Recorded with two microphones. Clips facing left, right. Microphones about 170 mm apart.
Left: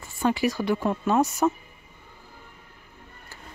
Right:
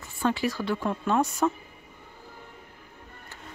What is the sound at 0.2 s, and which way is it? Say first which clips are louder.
Speech: left 3 dB; 15° left (ahead or behind).